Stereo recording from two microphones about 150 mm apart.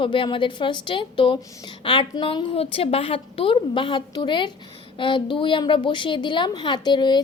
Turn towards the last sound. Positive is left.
turn(degrees=30)  # may be behind; listen again after turning